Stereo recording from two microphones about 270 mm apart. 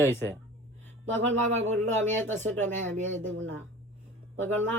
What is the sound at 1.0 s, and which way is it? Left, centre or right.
Speech, right.